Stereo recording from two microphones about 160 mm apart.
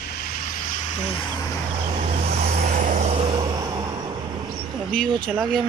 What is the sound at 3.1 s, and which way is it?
Vehicle, 35° right (ahead or behind).